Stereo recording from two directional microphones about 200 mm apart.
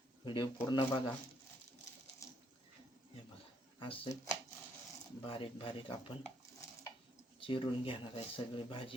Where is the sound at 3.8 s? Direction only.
25° left (ahead or behind).